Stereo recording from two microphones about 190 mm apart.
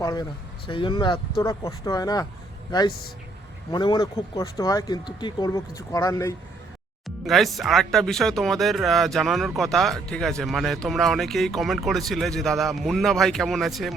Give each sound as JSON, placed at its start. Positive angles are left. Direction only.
{"t": 0.0, "sound": "speech", "side_deg": 20}
{"t": 3.7, "sound": "speech", "side_deg": 25}
{"t": 7.3, "sound": "speech", "side_deg": 0}